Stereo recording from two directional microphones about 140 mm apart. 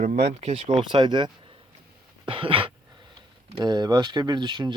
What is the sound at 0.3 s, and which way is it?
Speech, 45° right (ahead or behind).